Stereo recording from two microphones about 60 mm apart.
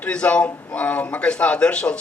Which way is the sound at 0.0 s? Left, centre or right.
Centre.